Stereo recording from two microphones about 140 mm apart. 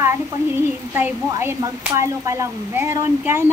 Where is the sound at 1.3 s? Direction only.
15° right (ahead or behind).